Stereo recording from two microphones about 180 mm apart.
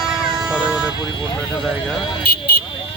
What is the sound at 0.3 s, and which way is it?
Vehicle, 5° right (ahead or behind).